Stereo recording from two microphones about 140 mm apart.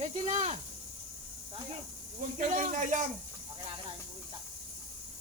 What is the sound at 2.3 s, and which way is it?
Speech, 60° right (ahead or behind).